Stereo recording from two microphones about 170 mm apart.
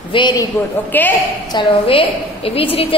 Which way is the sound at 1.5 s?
30° left (ahead or behind).